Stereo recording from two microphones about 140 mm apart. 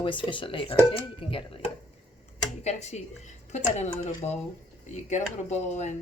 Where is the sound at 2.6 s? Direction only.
55° left (ahead or behind).